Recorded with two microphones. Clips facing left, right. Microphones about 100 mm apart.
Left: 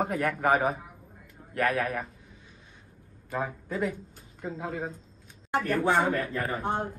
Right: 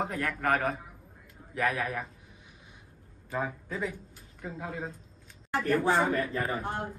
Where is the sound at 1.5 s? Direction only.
Centre (ahead or behind).